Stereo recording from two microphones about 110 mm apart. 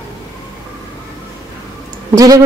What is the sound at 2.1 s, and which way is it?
Speech, 35° right (ahead or behind).